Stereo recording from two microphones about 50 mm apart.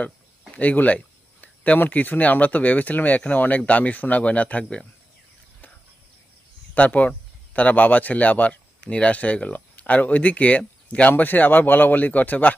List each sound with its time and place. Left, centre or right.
0.5 s speech: left
6.7 s speech: left
11.1 s speech: left